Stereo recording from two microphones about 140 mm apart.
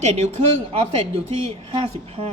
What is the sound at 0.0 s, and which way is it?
Speech, 50° right (ahead or behind).